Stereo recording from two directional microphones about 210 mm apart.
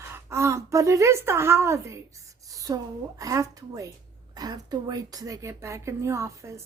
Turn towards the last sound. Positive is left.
turn(degrees=-15)  # may be behind; listen again after turning